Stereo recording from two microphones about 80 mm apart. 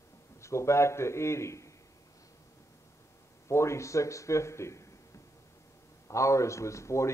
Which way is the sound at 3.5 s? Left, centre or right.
Left.